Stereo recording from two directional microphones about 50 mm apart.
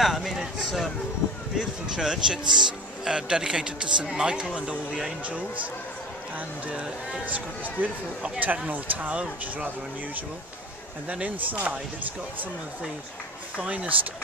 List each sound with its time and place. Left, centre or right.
0.0 s a man's voice: centre
7.2 s speech: right
11.1 s speech: right
13.6 s speech: right